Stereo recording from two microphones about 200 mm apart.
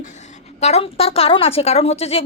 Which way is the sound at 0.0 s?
35° left (ahead or behind).